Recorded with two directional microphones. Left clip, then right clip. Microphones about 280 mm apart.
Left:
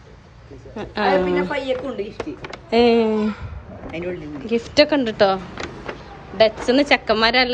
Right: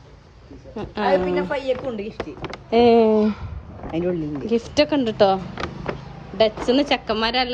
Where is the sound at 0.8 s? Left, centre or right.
Centre.